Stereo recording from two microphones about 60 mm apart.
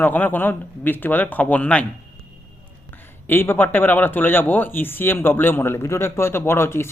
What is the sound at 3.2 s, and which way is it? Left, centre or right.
Speech, left.